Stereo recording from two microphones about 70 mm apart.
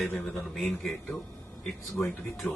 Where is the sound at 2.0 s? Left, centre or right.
Centre.